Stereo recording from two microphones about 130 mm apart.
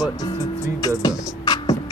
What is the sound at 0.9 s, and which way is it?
Beatboxing, 30° left (ahead or behind).